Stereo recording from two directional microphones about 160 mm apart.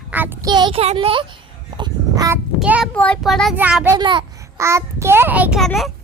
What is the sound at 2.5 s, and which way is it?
Speech, 5° right (ahead or behind).